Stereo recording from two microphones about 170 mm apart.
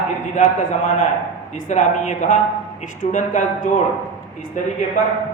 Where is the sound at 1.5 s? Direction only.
45° left (ahead or behind).